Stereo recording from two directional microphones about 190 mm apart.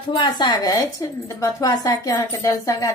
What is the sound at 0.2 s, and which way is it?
A woman's voice, 25° left (ahead or behind).